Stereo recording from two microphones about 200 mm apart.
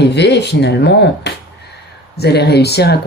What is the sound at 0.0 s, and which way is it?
Speech, 55° left (ahead or behind).